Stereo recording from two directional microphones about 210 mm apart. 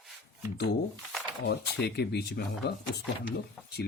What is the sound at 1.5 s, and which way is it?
Speech, 50° left (ahead or behind).